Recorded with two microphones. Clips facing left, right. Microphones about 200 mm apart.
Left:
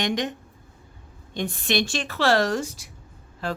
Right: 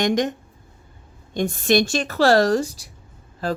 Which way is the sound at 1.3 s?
45° right (ahead or behind).